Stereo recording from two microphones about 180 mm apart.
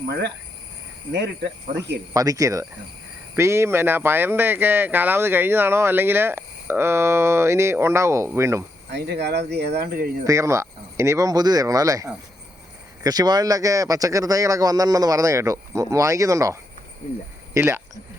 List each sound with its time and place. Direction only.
1.1 s speech: 70° right (ahead or behind)
2.1 s speech: 20° right (ahead or behind)
8.9 s speech: 65° right (ahead or behind)
10.2 s speech: 15° right (ahead or behind)